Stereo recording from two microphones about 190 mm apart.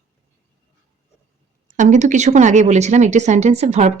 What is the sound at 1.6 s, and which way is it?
Speech, 40° right (ahead or behind).